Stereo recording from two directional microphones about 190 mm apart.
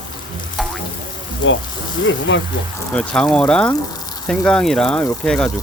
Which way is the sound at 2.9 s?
5° left (ahead or behind).